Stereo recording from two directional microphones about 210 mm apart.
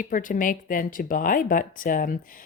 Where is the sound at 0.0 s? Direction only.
40° left (ahead or behind).